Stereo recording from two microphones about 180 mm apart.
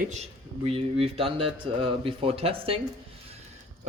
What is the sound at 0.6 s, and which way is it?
Speech, 35° right (ahead or behind).